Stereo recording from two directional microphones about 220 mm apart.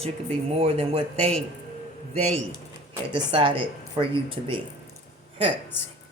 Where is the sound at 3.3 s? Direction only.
25° right (ahead or behind).